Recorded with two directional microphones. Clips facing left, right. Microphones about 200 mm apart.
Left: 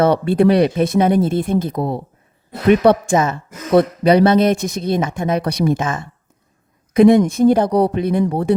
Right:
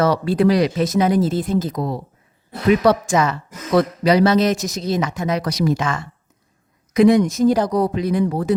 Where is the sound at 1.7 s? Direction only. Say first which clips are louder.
Left 3 dB; 25° left (ahead or behind).